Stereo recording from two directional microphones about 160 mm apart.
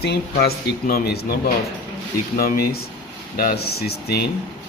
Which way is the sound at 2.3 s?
65° left (ahead or behind).